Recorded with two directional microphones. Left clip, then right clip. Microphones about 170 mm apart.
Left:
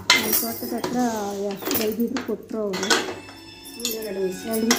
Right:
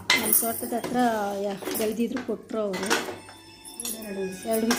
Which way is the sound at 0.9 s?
25° right (ahead or behind).